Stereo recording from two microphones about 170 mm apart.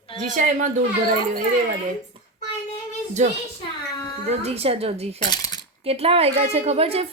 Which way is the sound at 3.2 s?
45° right (ahead or behind).